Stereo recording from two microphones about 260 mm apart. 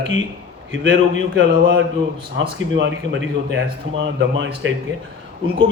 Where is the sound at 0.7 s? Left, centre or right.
Right.